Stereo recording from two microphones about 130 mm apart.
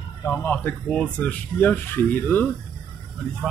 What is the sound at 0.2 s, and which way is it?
Speech, 15° left (ahead or behind).